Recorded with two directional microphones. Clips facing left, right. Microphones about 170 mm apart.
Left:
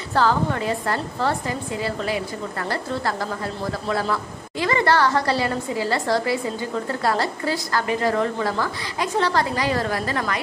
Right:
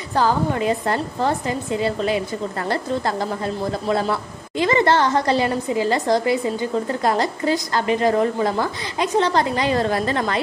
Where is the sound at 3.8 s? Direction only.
20° right (ahead or behind).